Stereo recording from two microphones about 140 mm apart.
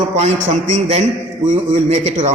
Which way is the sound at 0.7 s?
45° right (ahead or behind).